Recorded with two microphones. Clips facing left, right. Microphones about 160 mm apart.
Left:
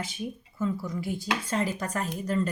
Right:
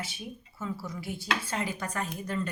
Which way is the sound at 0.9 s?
45° left (ahead or behind).